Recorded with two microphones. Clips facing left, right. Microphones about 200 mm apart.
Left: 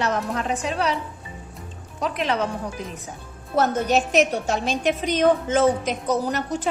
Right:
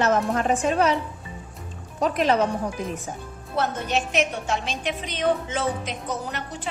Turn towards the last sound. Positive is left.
turn(degrees=40)  # may be behind; listen again after turning